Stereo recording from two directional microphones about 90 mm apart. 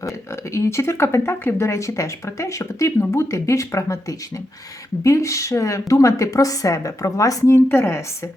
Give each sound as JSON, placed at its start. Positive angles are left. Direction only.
{"t": 0.0, "sound": "speech", "side_deg": 30}